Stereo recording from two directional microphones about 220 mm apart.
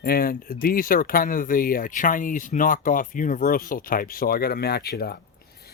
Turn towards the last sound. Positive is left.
turn(degrees=45)  # may be behind; listen again after turning